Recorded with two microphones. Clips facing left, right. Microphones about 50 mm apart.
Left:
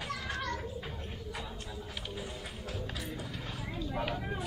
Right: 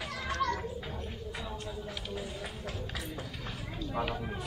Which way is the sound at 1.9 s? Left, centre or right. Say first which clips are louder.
Right 2 dB; centre.